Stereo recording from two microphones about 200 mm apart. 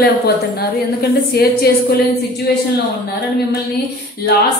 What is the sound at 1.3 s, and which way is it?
Speech, 50° left (ahead or behind).